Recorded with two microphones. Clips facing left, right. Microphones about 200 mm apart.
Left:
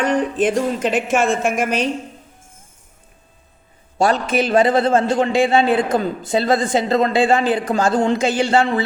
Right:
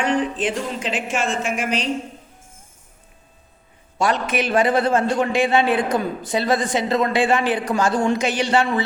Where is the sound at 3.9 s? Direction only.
35° left (ahead or behind).